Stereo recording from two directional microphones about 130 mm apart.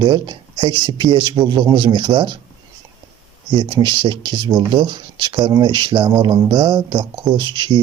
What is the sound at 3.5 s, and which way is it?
Speech, 35° right (ahead or behind).